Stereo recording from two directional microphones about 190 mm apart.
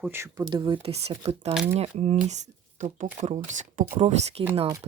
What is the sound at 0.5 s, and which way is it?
Speech, 25° right (ahead or behind).